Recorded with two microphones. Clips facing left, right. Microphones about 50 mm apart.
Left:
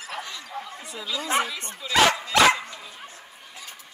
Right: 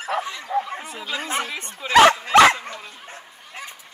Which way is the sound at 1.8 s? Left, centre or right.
Right.